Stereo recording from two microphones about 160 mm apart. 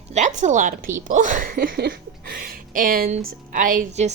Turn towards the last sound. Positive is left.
turn(degrees=-50)  # may be behind; listen again after turning